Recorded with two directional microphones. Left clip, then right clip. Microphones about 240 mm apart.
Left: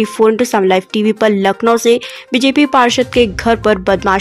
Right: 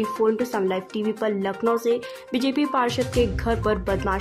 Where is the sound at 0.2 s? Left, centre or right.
Left.